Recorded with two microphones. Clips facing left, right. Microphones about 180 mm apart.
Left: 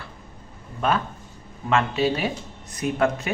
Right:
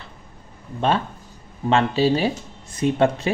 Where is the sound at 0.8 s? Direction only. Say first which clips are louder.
Right 2 dB; 30° right (ahead or behind).